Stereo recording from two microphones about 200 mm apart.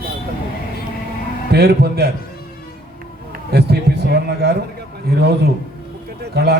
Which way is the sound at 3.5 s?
55° right (ahead or behind).